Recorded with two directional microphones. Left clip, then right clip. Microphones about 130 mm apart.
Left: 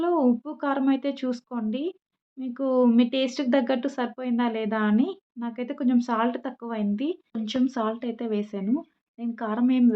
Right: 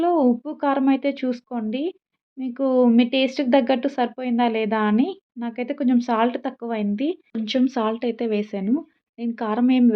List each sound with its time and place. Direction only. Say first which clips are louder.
0.0 s speech: right 4 dB; 20° right (ahead or behind)